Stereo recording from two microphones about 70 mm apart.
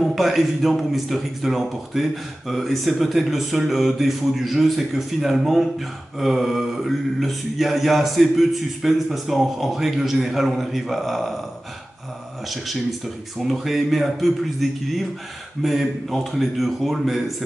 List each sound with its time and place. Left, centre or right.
0.0 s a man's voice: centre
13.4 s a man's voice: centre